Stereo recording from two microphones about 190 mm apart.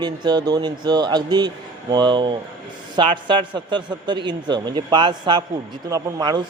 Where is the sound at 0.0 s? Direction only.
20° right (ahead or behind).